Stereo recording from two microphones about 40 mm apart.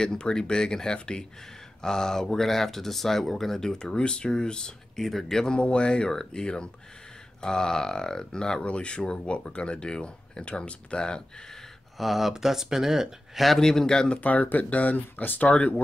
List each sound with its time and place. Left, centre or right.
0.0 s speech: centre
5.0 s speech: centre
5.6 s speech: left
8.6 s speech: left
12.0 s speech: centre
13.6 s speech: centre
14.1 s speech: left